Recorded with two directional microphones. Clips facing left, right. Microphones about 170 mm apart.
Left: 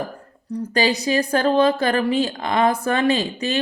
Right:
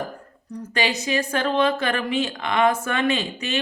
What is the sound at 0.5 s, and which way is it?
A woman's voice, 35° left (ahead or behind).